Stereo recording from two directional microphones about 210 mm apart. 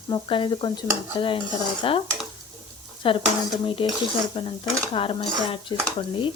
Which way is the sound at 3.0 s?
25° left (ahead or behind).